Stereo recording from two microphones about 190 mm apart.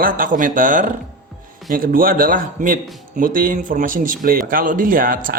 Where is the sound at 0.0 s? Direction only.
45° right (ahead or behind).